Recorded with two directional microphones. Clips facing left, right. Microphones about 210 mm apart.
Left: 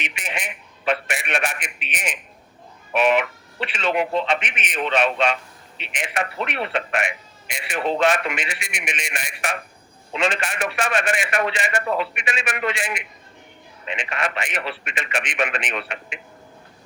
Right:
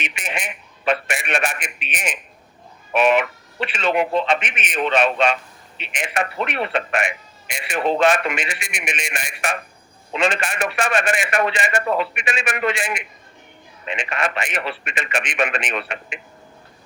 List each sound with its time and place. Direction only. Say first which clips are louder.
0.0 s a man's voice: right 2 dB; 45° right (ahead or behind)